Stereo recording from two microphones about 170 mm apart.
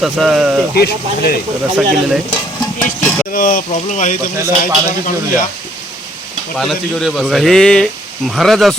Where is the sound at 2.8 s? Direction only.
15° left (ahead or behind).